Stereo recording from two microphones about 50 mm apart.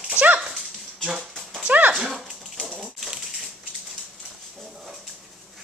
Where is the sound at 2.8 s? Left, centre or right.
Centre.